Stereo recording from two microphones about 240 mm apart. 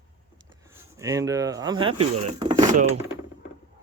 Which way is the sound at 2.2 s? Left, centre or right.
Right.